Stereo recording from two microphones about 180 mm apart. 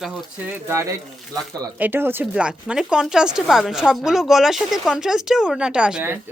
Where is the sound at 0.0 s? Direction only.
Centre (ahead or behind).